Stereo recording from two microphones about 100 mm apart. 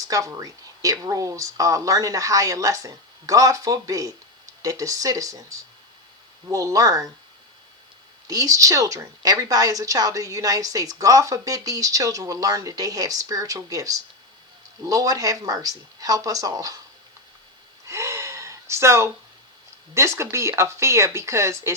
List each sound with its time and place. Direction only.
0.1 s a woman's voice: 35° right (ahead or behind)
8.3 s a woman's voice: 35° right (ahead or behind)
17.8 s gasp: 30° right (ahead or behind)
19.9 s speech: 30° right (ahead or behind)